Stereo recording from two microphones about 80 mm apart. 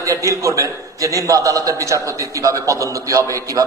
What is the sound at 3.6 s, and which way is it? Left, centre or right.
Speech, right.